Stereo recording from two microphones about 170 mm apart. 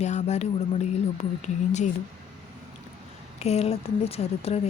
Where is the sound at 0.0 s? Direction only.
40° left (ahead or behind).